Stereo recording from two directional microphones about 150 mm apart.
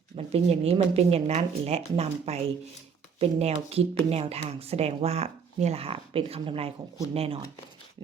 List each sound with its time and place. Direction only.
0.2 s speech: 45° right (ahead or behind)